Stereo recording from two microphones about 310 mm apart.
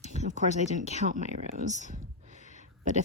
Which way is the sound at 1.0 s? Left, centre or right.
Right.